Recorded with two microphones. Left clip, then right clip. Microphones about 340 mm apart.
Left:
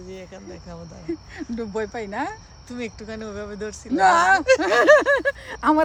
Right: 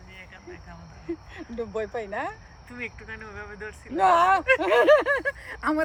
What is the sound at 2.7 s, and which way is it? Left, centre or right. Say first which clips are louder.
Speech: left 4 dB; centre.